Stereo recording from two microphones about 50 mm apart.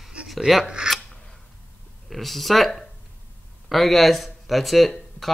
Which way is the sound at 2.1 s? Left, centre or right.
Centre.